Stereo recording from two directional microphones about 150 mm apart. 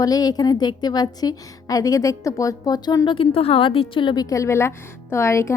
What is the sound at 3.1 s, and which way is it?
A woman's voice, 40° left (ahead or behind).